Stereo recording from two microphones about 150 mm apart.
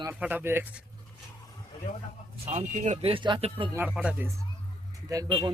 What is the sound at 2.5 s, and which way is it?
Speech, 45° right (ahead or behind).